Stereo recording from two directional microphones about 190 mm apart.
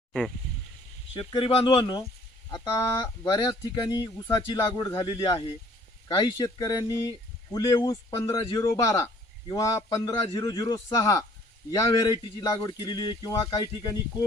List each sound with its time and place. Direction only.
1.1 s speech: 25° left (ahead or behind)